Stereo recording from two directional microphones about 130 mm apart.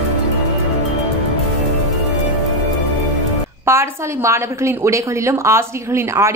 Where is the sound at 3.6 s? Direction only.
20° right (ahead or behind).